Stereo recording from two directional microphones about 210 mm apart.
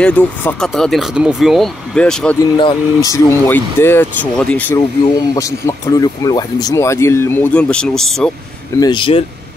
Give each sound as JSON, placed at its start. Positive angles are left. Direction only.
{"t": 0.0, "sound": "speech", "side_deg": 5}
{"t": 2.5, "sound": "speech", "side_deg": 20}
{"t": 8.7, "sound": "speech", "side_deg": 20}